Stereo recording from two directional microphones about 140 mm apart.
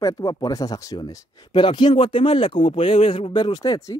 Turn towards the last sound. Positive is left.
turn(degrees=25)  # may be behind; listen again after turning